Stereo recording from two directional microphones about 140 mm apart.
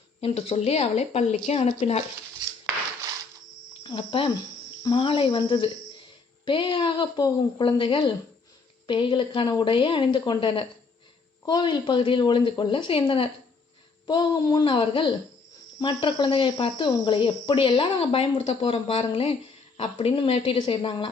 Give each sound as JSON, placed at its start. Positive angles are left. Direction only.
{"t": 0.2, "sound": "speech", "side_deg": 45}
{"t": 3.8, "sound": "speech", "side_deg": 40}
{"t": 14.1, "sound": "speech", "side_deg": 30}